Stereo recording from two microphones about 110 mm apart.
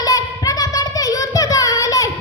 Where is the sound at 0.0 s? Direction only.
35° left (ahead or behind).